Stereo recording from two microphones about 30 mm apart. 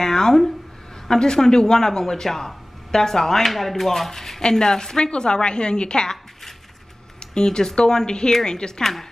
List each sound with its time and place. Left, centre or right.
0.0 s a sound: centre
1.0 s a woman's voice: left
7.2 s a woman's voice: left